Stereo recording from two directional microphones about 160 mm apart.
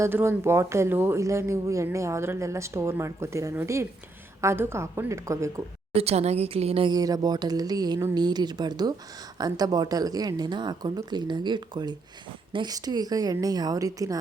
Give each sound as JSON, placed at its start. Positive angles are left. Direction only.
{"t": 0.0, "sound": "speech", "side_deg": -15}
{"t": 5.9, "sound": "a woman's voice", "side_deg": -40}
{"t": 6.9, "sound": "a woman's voice", "side_deg": -25}